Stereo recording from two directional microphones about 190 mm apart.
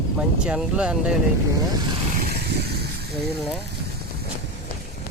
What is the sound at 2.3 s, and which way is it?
Vehicle, 60° right (ahead or behind).